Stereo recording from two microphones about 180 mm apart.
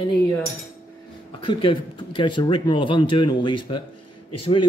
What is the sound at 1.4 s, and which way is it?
Speech, 30° left (ahead or behind).